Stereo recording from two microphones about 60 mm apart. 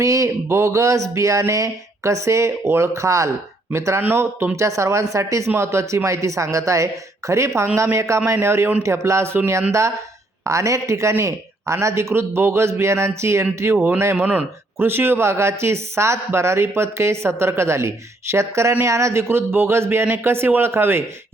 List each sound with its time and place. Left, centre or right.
0.0 s speech: right
4.5 s speech: right
8.8 s speech: right
10.4 s speech: right
14.3 s speech: right
19.3 s speech: right